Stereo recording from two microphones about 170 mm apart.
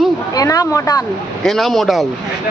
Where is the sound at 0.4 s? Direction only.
20° left (ahead or behind).